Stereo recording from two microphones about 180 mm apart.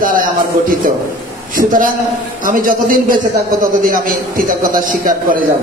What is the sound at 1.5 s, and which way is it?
A man's voice, 50° right (ahead or behind).